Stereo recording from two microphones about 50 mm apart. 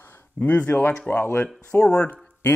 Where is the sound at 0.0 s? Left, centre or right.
Left.